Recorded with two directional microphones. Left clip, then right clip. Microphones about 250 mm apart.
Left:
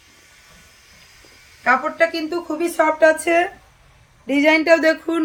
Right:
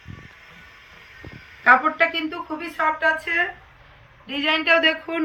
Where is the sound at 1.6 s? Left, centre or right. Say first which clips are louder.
Right 1 dB; centre.